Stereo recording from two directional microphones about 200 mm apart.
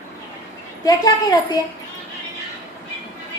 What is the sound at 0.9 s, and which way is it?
Speech, 20° left (ahead or behind).